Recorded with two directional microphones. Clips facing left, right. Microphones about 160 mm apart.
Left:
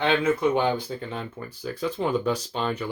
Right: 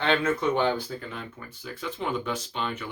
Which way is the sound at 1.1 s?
35° left (ahead or behind).